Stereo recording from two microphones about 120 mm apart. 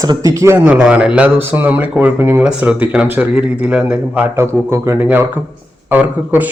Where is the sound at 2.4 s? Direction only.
10° right (ahead or behind).